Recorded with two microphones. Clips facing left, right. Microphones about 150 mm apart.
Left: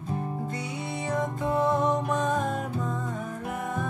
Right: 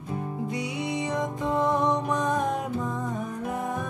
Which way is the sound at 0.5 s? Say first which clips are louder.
Right 4 dB; 15° right (ahead or behind).